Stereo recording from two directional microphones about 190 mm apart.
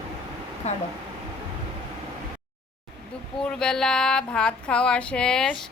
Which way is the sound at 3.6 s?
5° left (ahead or behind).